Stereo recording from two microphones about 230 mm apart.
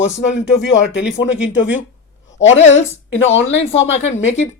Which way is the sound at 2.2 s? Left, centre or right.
Left.